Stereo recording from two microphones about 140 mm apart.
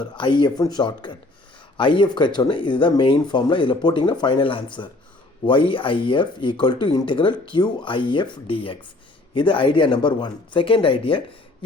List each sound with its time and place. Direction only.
0.0 s speech: 35° left (ahead or behind)